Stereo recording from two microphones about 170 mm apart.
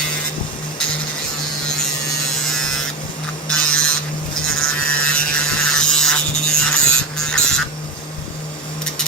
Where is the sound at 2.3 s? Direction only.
Centre (ahead or behind).